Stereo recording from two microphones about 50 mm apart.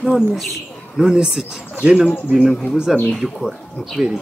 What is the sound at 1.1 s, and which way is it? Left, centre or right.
Speech, centre.